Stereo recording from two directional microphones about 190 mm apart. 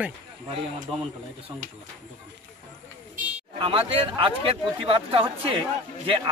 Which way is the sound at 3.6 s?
30° right (ahead or behind).